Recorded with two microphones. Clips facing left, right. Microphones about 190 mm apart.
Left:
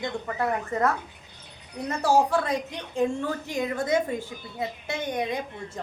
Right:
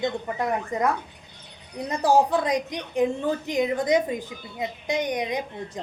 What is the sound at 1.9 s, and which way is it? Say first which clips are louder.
A woman's voice: right 2 dB; 15° right (ahead or behind).